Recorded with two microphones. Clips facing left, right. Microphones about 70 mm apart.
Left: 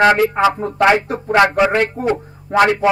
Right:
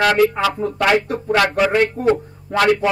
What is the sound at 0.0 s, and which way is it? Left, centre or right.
Speech, left.